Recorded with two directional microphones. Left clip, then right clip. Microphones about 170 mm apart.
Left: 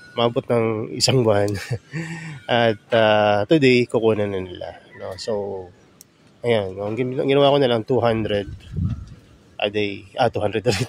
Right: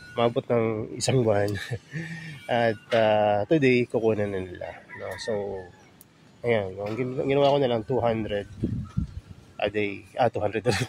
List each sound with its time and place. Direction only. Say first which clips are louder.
0.1 s speech: left 4 dB; 15° left (ahead or behind); by 8.5 s 35° left (ahead or behind)
9.6 s speech: left 4 dB; 20° left (ahead or behind)